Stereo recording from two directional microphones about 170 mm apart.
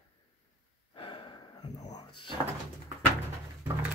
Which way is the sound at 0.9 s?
30° left (ahead or behind).